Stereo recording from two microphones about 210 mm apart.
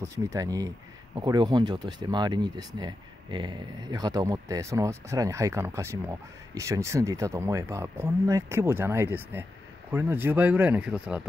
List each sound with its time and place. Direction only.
0.0 s speech: 15° right (ahead or behind)